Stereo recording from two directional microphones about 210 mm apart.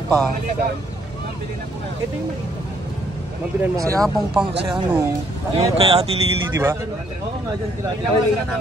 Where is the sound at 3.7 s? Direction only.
15° right (ahead or behind).